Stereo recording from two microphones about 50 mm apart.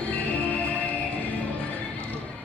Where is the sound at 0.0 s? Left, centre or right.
Left.